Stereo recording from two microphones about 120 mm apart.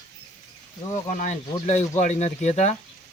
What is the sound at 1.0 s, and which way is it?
Speech, 85° left.